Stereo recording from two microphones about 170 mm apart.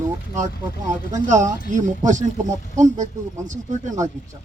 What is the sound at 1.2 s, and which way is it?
Speech, 45° right (ahead or behind).